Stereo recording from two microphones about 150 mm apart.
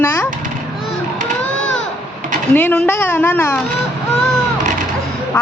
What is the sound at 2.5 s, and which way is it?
Speech, 10° left (ahead or behind).